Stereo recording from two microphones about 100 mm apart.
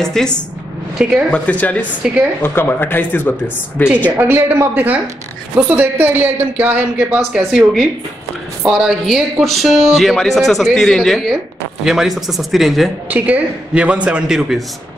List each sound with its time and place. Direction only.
0.0 s speech: 5° left (ahead or behind)
1.0 s a man's voice: 10° right (ahead or behind)
1.3 s speech: 15° left (ahead or behind)
4.2 s a man's voice: 20° right (ahead or behind)
7.2 s speech: centre (ahead or behind)
13.1 s a man's voice: 15° right (ahead or behind)